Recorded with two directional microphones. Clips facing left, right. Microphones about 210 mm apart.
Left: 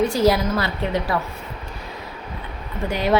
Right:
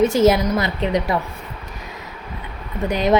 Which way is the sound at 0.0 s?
20° right (ahead or behind).